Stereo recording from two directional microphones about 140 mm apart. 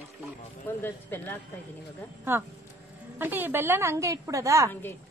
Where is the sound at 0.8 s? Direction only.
15° left (ahead or behind).